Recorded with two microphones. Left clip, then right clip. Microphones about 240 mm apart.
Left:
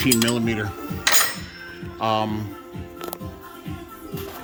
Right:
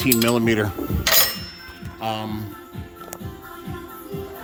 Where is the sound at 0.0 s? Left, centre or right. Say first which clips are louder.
Right 1 dB; centre.